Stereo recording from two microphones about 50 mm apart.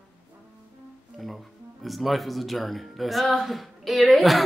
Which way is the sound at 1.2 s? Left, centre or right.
Centre.